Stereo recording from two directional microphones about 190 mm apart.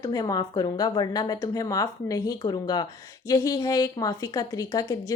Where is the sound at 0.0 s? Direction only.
20° left (ahead or behind).